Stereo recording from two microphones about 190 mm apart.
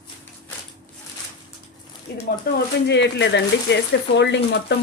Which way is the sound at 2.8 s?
65° left (ahead or behind).